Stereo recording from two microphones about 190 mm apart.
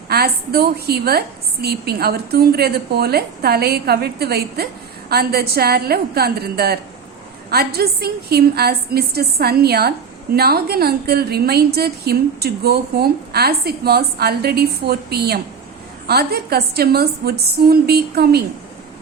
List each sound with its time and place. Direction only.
0.1 s a woman's voice: 55° right (ahead or behind)